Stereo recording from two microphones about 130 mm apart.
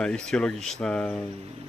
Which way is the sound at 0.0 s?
5° left (ahead or behind).